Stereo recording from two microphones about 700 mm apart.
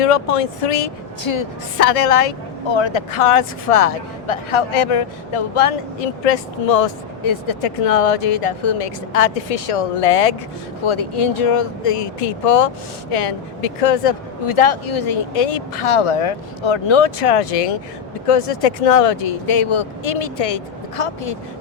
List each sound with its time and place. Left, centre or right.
0.0 s speech: left
1.2 s speech: left
1.8 s a woman's voice: left
2.6 s speech: left
7.2 s speech: left